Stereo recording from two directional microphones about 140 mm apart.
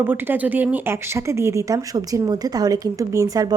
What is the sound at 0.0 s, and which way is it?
A woman's voice, 15° right (ahead or behind).